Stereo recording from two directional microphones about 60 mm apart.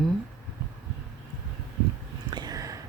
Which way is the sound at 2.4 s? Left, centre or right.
Right.